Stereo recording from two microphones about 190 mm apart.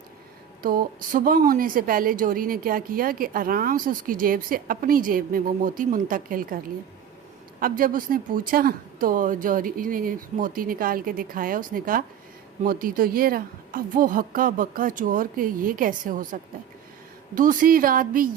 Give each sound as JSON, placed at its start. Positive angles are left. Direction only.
{"t": 0.6, "sound": "a woman's voice", "side_deg": -50}
{"t": 7.6, "sound": "a woman's voice", "side_deg": -45}